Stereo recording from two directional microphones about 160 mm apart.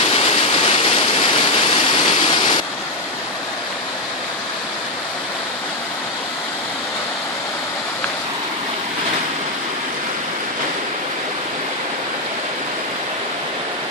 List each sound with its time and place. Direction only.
0.0 s rain: 40° left (ahead or behind)